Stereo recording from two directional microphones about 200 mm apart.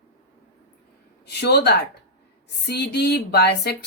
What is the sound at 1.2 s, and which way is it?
A woman's voice, 55° left (ahead or behind).